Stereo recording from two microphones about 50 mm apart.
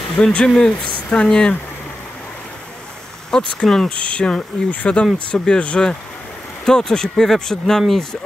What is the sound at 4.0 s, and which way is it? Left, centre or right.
Speech, left.